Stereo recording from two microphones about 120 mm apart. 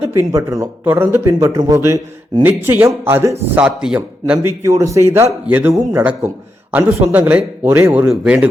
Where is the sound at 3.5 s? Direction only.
10° right (ahead or behind).